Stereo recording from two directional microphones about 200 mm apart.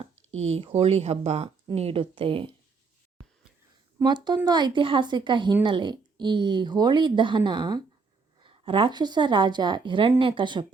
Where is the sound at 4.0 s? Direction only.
20° right (ahead or behind).